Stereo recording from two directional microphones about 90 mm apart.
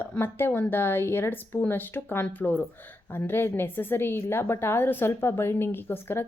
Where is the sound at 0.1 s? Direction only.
25° left (ahead or behind).